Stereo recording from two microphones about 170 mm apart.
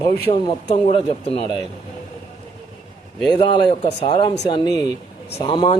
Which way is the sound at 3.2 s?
25° left (ahead or behind).